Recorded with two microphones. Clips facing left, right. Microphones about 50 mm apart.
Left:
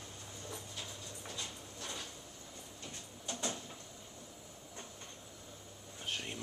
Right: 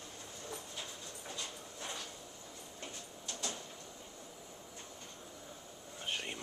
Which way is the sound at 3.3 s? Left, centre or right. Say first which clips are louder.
Left 3 dB; left.